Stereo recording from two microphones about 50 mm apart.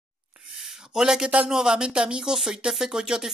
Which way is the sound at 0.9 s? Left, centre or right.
Centre.